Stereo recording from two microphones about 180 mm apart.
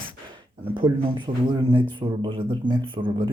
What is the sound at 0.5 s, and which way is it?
Speech, 30° right (ahead or behind).